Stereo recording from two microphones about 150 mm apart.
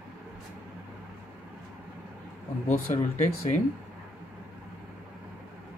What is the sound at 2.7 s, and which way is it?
Speech, 55° left (ahead or behind).